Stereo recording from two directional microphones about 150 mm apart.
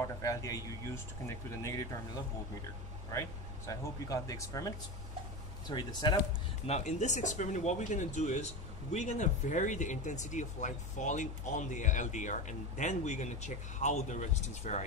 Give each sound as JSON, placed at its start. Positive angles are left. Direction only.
{"t": 0.0, "sound": "speech", "side_deg": 20}
{"t": 3.1, "sound": "speech", "side_deg": 20}
{"t": 6.6, "sound": "speech", "side_deg": 50}